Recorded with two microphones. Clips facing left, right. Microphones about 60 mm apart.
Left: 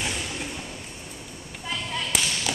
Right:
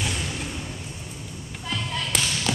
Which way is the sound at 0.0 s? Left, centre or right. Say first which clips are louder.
Right 1 dB; centre.